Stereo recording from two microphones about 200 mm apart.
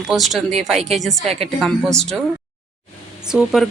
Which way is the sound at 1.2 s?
30° right (ahead or behind).